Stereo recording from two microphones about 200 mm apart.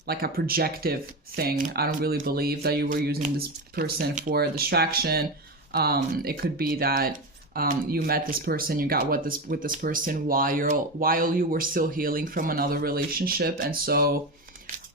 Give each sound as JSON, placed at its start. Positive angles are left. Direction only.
{"t": 0.0, "sound": "speech", "side_deg": -50}